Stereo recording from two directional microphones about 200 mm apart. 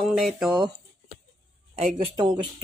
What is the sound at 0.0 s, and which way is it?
Speech, centre (ahead or behind).